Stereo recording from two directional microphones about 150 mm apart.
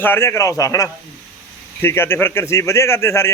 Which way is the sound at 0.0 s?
15° left (ahead or behind).